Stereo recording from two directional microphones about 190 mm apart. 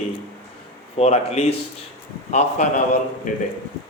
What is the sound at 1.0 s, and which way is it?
A man's voice, 35° left (ahead or behind).